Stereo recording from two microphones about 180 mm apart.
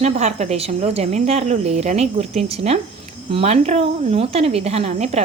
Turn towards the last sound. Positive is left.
turn(degrees=-35)  # may be behind; listen again after turning